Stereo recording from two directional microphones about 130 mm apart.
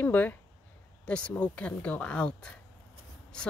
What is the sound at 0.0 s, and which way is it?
Speech, 15° left (ahead or behind).